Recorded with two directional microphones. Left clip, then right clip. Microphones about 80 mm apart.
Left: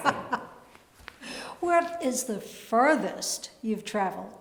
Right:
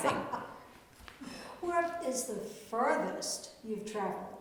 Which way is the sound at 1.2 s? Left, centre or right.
Left.